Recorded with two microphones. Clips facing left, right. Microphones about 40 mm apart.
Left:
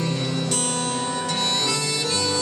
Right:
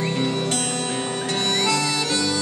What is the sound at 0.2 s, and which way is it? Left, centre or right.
Music, right.